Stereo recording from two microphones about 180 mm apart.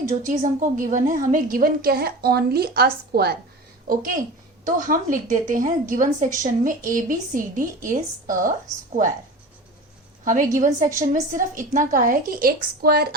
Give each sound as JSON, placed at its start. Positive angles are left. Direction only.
{"t": 0.0, "sound": "a woman's voice", "side_deg": -45}
{"t": 10.2, "sound": "a woman's voice", "side_deg": -45}